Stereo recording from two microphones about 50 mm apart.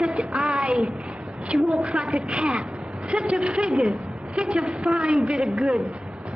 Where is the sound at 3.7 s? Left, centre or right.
Centre.